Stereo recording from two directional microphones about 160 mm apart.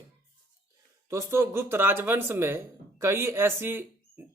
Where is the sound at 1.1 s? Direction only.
15° right (ahead or behind).